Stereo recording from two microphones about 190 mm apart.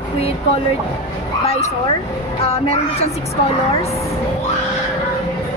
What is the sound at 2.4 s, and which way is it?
Speech, 30° left (ahead or behind).